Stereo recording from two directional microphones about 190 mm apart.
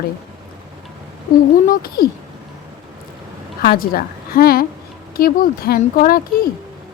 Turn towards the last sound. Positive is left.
turn(degrees=50)  # may be behind; listen again after turning